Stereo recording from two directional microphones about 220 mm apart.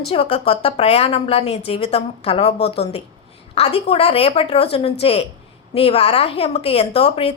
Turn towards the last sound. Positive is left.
turn(degrees=25)  # may be behind; listen again after turning